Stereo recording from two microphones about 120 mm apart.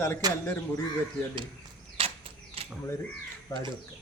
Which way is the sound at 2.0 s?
50° right (ahead or behind).